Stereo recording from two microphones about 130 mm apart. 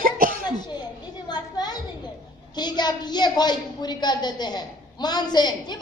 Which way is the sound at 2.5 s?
35° left (ahead or behind).